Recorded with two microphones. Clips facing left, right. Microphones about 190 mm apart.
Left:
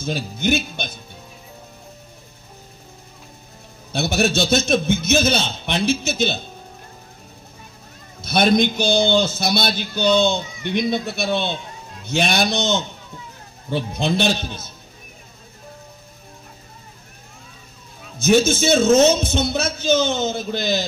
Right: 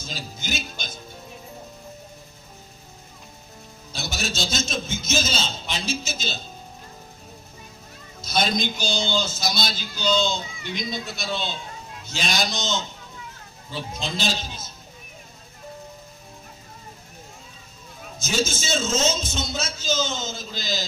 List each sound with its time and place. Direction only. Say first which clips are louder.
0.0 s speech: left 12 dB; 60° left (ahead or behind)
3.9 s a man's voice: left 11 dB; 60° left (ahead or behind)
8.2 s a man's voice: left 8 dB; 60° left (ahead or behind)
18.2 s a man's voice: left 11 dB; 60° left (ahead or behind)